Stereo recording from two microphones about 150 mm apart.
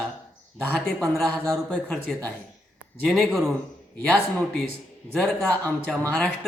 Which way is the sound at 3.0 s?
Centre (ahead or behind).